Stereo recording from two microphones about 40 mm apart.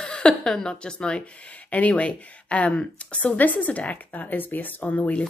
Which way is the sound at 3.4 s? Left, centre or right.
Left.